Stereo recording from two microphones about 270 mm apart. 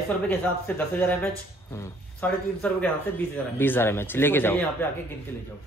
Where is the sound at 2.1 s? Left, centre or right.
Centre.